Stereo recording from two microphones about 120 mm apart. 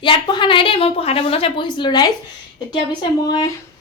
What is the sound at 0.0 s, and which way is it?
A woman's voice, 40° left (ahead or behind).